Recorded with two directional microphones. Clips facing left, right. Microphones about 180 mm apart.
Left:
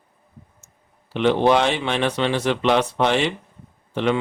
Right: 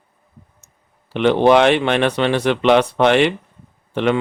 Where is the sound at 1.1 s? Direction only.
60° right (ahead or behind).